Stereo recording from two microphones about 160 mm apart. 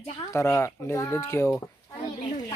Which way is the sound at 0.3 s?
15° left (ahead or behind).